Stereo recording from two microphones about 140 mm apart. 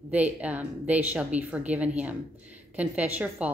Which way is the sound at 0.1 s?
10° right (ahead or behind).